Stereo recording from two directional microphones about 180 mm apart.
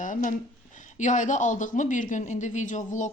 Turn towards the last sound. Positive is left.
turn(degrees=40)  # may be behind; listen again after turning